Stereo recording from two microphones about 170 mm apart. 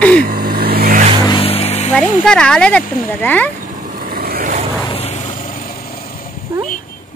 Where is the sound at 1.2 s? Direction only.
30° left (ahead or behind).